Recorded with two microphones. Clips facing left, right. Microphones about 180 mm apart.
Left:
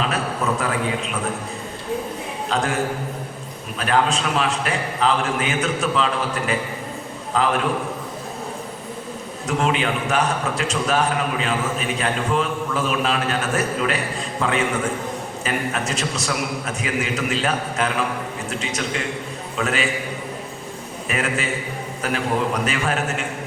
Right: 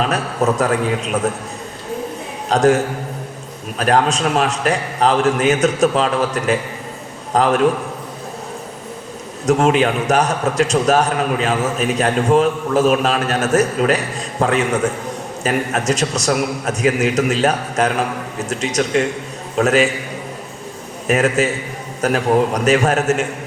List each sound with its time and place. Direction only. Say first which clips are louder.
0.0 s a man's voice: right 5 dB; 45° right (ahead or behind)
2.5 s a man's voice: right 9 dB; 45° right (ahead or behind)
9.5 s a man's voice: right 7 dB; 45° right (ahead or behind)
21.1 s a man's voice: right 8 dB; 45° right (ahead or behind)